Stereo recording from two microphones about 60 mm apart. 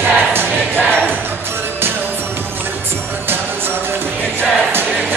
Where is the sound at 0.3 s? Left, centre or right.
Right.